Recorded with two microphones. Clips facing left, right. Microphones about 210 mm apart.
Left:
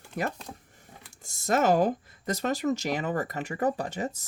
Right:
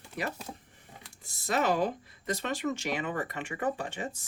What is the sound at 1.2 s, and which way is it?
Speech, 45° left (ahead or behind).